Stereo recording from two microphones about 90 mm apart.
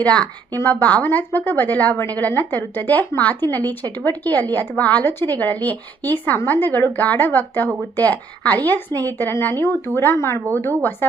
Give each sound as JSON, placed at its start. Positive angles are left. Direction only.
{"t": 0.0, "sound": "speech", "side_deg": 15}